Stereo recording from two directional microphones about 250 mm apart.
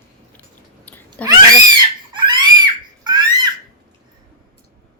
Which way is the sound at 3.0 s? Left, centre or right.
Centre.